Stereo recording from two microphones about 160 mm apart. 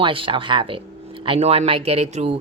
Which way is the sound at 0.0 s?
30° right (ahead or behind).